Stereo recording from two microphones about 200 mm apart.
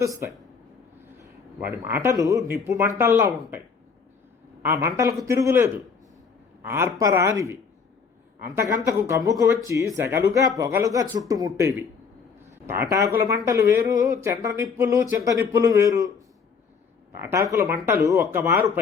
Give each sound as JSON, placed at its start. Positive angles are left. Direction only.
{"t": 0.0, "sound": "speech", "side_deg": -15}
{"t": 1.5, "sound": "speech", "side_deg": -10}
{"t": 4.6, "sound": "speech", "side_deg": -15}
{"t": 8.8, "sound": "speech", "side_deg": -15}
{"t": 17.2, "sound": "speech", "side_deg": -15}